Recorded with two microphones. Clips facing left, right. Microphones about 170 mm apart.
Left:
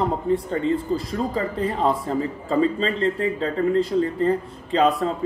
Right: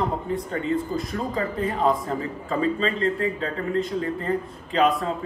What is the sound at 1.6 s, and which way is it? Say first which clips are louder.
Speech: even; 30° left (ahead or behind).